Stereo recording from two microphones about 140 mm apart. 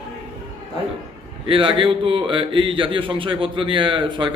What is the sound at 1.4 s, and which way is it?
Speech, 40° right (ahead or behind).